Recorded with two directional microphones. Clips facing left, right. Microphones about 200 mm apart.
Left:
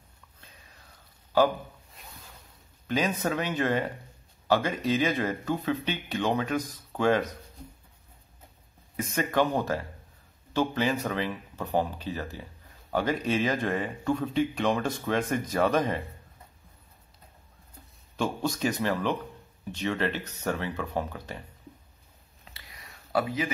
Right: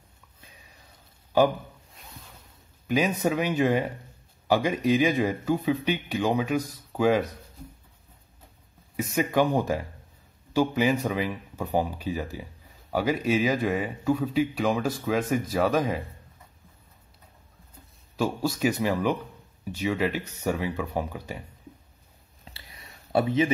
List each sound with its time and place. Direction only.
0.4 s whispering: 10° right (ahead or behind)
2.9 s speech: 10° right (ahead or behind)
8.9 s speech: 10° right (ahead or behind)
18.1 s speech: 5° right (ahead or behind)
22.4 s a sound: 30° right (ahead or behind)